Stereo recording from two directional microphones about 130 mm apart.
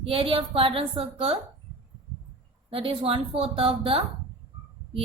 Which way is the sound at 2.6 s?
45° right (ahead or behind).